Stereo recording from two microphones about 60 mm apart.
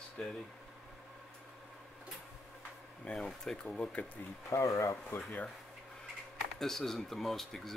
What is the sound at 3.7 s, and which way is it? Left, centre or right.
Speech, left.